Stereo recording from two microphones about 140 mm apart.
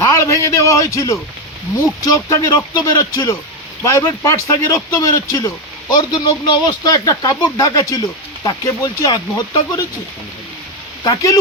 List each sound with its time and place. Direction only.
0.0 s speech: 20° left (ahead or behind)
6.1 s speech: 35° left (ahead or behind)
11.0 s speech: 25° left (ahead or behind)